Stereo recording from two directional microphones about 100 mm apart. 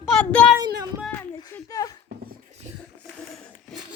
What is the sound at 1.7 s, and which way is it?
Speech, 35° left (ahead or behind).